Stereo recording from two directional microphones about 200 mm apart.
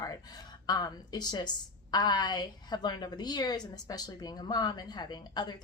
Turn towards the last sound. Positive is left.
turn(degrees=20)  # may be behind; listen again after turning